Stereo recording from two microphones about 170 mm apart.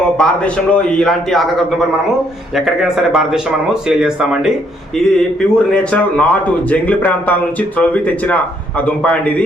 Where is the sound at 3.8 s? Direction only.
5° right (ahead or behind).